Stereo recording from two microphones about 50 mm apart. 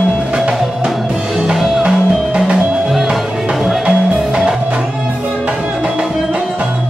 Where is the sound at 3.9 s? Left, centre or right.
Centre.